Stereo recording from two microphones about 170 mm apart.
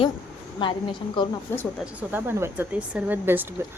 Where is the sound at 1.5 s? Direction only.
15° left (ahead or behind).